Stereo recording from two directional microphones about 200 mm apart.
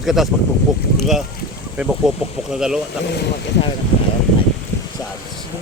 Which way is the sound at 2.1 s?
Centre (ahead or behind).